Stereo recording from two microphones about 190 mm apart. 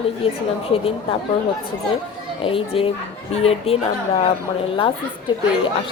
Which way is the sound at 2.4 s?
30° left (ahead or behind).